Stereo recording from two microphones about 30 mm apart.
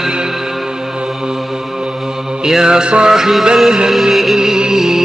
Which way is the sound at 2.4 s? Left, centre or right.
Right.